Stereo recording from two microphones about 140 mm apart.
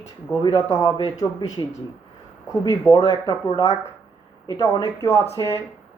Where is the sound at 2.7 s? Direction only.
25° left (ahead or behind).